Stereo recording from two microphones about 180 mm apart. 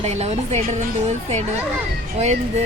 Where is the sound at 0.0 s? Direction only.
35° right (ahead or behind).